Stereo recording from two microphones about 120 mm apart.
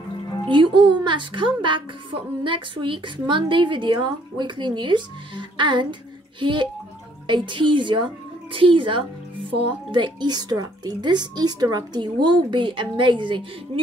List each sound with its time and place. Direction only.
0.5 s a woman's voice: 45° right (ahead or behind)